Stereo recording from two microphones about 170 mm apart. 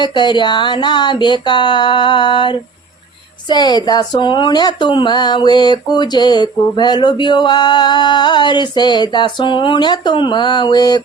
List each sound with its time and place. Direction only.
0.0 s speech: 25° left (ahead or behind)